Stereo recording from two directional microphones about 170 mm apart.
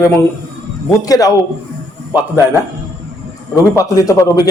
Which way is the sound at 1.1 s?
20° left (ahead or behind).